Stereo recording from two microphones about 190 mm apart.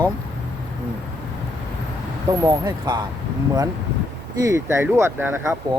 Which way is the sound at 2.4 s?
20° right (ahead or behind).